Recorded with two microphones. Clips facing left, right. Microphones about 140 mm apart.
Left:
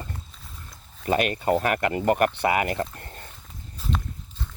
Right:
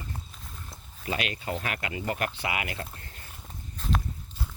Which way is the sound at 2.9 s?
50° left (ahead or behind).